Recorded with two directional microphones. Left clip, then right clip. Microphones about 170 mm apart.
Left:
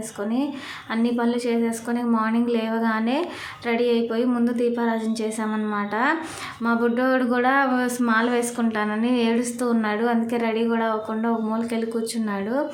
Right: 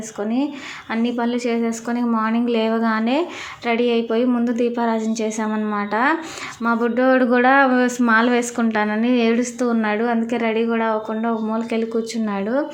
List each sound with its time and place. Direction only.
0.2 s speech: 20° right (ahead or behind)